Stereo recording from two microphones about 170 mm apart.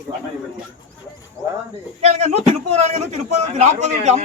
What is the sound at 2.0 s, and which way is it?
A man's voice, 40° right (ahead or behind).